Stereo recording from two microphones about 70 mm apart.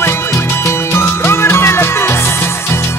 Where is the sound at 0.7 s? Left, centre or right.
Left.